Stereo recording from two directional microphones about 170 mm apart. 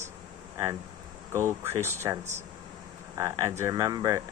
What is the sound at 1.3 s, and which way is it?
Speech, 15° right (ahead or behind).